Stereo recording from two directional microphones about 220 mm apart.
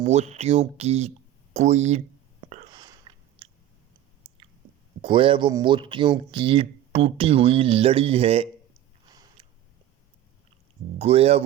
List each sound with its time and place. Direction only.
0.0 s speech: 30° right (ahead or behind)
2.7 s chewing: 20° right (ahead or behind)
5.0 s speech: 20° right (ahead or behind)
9.0 s a sound: 15° right (ahead or behind)
10.9 s speech: 25° right (ahead or behind)